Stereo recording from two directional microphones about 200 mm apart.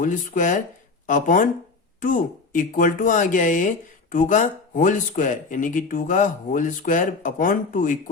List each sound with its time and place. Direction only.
0.0 s speech: 40° left (ahead or behind)